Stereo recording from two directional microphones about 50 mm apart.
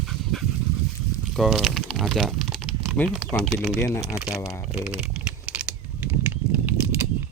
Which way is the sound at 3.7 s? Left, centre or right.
Left.